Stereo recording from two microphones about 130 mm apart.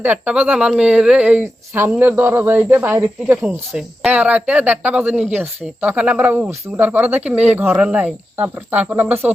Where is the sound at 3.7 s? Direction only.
5° right (ahead or behind).